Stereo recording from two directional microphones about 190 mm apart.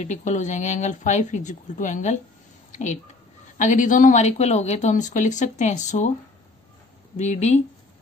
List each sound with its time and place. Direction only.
0.0 s speech: 40° left (ahead or behind)
3.5 s speech: 40° left (ahead or behind)
7.2 s speech: 35° left (ahead or behind)